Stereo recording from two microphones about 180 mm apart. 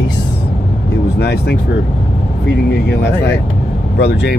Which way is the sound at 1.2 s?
70° left (ahead or behind).